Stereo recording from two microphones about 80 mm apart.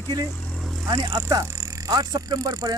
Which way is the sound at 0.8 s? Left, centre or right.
Right.